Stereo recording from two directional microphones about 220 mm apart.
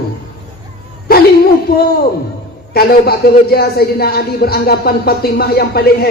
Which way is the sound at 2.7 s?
45° left (ahead or behind).